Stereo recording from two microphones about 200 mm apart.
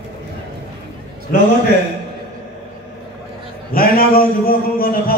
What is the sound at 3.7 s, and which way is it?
Speech, 45° left (ahead or behind).